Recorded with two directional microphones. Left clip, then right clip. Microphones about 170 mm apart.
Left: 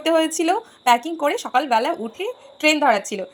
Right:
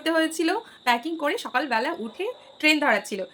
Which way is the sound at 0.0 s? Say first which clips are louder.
Left 5 dB; 15° left (ahead or behind).